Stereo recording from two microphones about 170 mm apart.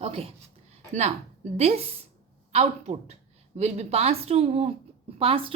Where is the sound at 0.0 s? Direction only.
35° right (ahead or behind).